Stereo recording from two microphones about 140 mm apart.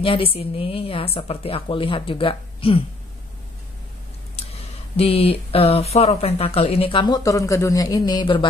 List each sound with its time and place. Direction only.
0.0 s a woman's voice: 40° left (ahead or behind)
4.4 s speech: 45° left (ahead or behind)